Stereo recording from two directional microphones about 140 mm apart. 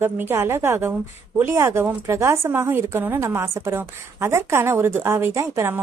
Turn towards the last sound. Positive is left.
turn(degrees=-20)  # may be behind; listen again after turning